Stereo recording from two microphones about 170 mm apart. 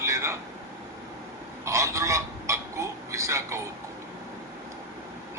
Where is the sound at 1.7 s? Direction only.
15° right (ahead or behind).